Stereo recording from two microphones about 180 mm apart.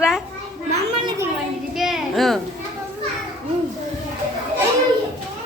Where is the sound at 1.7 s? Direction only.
Centre (ahead or behind).